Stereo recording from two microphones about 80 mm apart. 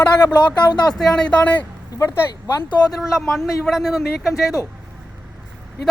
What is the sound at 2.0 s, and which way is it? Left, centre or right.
Speech, left.